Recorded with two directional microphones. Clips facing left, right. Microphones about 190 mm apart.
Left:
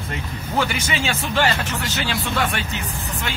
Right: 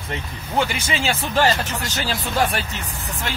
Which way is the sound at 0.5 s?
30° right (ahead or behind).